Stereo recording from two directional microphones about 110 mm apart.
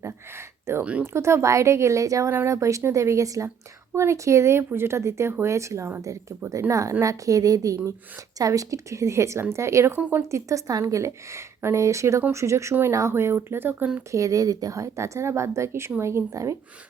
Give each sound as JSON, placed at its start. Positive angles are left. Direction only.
{"t": 0.0, "sound": "a sound", "side_deg": -25}
{"t": 1.0, "sound": "a woman's voice", "side_deg": -25}
{"t": 14.1, "sound": "a woman's voice", "side_deg": -30}